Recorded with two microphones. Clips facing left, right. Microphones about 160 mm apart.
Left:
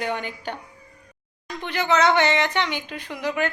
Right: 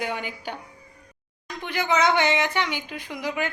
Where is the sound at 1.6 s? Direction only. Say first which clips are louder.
Left 2 dB; 10° right (ahead or behind).